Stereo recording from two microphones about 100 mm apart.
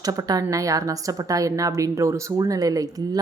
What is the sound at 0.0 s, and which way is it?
A woman's voice, 40° right (ahead or behind).